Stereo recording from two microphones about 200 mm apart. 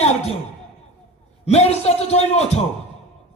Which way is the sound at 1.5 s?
30° left (ahead or behind).